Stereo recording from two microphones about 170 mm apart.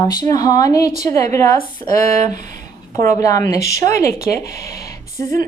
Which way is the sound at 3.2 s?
20° left (ahead or behind).